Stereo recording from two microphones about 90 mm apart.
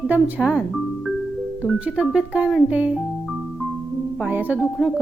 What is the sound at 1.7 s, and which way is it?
Speech, 10° right (ahead or behind).